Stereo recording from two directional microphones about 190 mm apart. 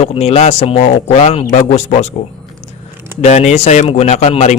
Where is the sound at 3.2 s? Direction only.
35° left (ahead or behind).